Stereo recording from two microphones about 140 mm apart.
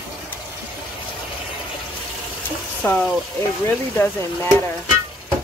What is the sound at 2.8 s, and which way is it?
Speech, 15° left (ahead or behind).